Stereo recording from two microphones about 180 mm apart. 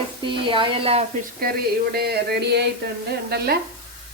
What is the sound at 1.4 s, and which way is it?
A woman's voice, 55° right (ahead or behind).